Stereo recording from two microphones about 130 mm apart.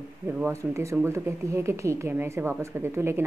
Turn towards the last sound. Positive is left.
turn(degrees=-20)  # may be behind; listen again after turning